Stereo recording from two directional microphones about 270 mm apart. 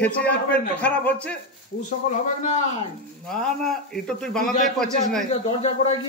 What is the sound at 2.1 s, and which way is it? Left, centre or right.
Speech, left.